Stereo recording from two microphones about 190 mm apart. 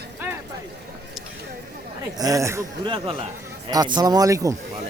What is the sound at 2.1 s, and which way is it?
Speech, 20° right (ahead or behind).